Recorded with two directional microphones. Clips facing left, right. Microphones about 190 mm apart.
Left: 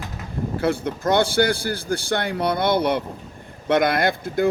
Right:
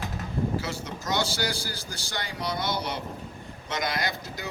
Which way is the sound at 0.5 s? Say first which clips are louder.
Left 9 dB; 55° left (ahead or behind).